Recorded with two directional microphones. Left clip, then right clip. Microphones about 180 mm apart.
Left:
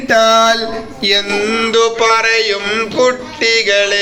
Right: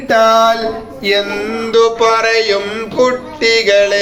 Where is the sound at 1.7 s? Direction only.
15° left (ahead or behind).